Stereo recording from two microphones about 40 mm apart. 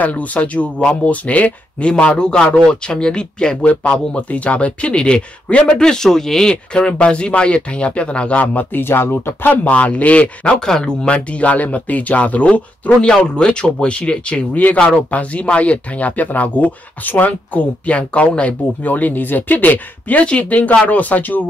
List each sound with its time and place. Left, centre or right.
0.0 s speech: left
2.0 s speech: left
3.6 s speech: left
5.8 s a man's voice: centre
6.9 s speech: left
8.7 s speech: left
9.5 s speech: left
10.4 s a man's voice: centre
11.1 s speech: left
13.4 s speech: left
14.5 s speech: left